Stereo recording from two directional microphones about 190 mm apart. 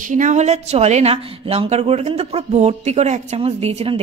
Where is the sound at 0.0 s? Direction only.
40° right (ahead or behind).